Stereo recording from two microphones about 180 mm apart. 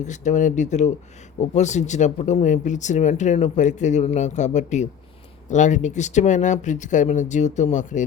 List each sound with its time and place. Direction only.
0.0 s speech: 40° left (ahead or behind)